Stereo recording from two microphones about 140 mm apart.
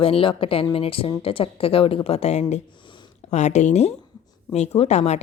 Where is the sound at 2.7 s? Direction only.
35° left (ahead or behind).